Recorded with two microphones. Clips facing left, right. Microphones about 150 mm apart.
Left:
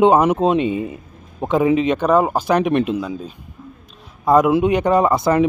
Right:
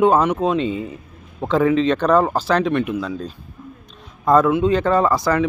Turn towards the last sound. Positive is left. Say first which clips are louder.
# left 2 dB
turn(degrees=20)  # may be behind; listen again after turning